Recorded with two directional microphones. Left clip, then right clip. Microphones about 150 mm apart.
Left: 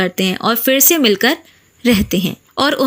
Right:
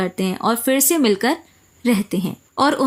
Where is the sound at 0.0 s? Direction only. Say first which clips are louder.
Left 5 dB; 10° left (ahead or behind).